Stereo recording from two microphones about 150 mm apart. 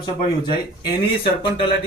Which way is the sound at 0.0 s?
30° left (ahead or behind).